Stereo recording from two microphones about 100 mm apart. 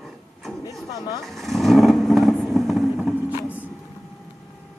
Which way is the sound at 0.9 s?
35° left (ahead or behind).